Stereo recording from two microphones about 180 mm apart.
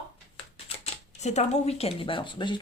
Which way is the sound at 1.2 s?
40° left (ahead or behind).